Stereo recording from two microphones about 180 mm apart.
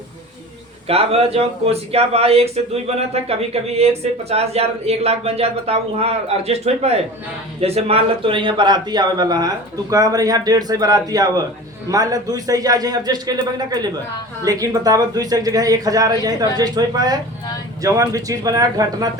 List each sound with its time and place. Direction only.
0.9 s speech: 35° right (ahead or behind)